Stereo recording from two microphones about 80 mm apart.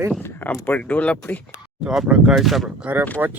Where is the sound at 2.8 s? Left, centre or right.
Centre.